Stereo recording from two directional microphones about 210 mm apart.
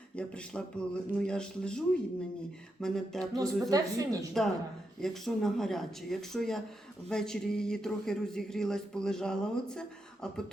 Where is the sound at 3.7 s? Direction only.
15° right (ahead or behind).